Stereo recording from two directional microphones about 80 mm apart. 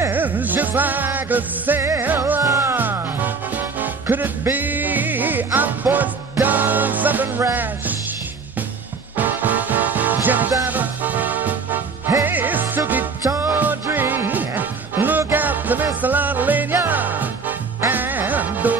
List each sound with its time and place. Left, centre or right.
0.1 s music: right
9.1 s music: right